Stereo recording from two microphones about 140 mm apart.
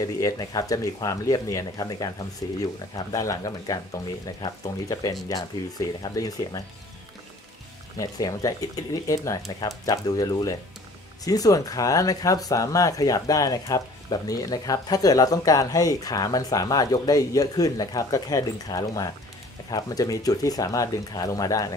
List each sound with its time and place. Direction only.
0.0 s speech: 30° left (ahead or behind)
3.1 s speech: 25° left (ahead or behind)
8.0 s speech: 25° left (ahead or behind)